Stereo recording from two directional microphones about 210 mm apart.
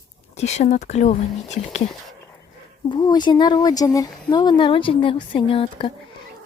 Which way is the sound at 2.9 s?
20° left (ahead or behind).